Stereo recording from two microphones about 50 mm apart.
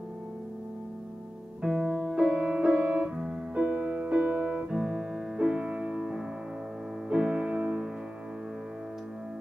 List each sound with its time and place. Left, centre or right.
1.6 s music: centre; by 4.6 s right
4.6 s music: centre